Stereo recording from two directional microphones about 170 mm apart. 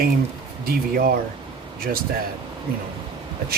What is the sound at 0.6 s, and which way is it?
Speech, 60° right (ahead or behind).